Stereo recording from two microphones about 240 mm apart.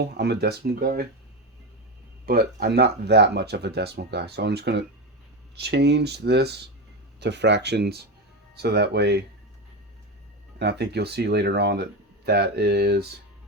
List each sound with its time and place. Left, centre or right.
0.0 s speech: right
2.2 s speech: right
10.6 s speech: right